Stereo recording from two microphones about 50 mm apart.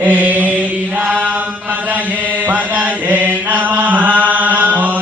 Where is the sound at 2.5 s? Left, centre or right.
Right.